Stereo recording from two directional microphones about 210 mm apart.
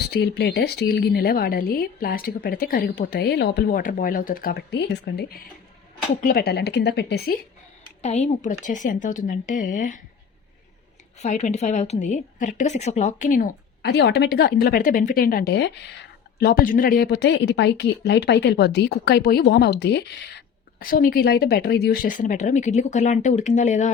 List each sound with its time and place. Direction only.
0.1 s a woman's voice: 50° left (ahead or behind)
8.0 s a woman's voice: 30° left (ahead or behind)
11.2 s a woman's voice: 35° left (ahead or behind); by 20.1 s 55° left (ahead or behind)
20.7 s a woman's voice: 45° left (ahead or behind)